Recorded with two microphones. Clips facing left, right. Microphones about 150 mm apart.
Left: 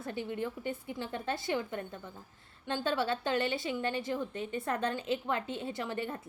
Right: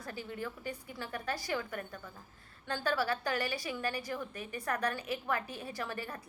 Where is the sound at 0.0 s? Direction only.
20° left (ahead or behind).